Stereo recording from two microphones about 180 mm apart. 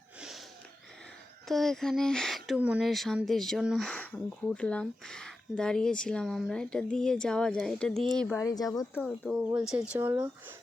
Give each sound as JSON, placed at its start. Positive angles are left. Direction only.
{"t": 1.5, "sound": "speech", "side_deg": 0}
{"t": 9.0, "sound": "speech", "side_deg": -5}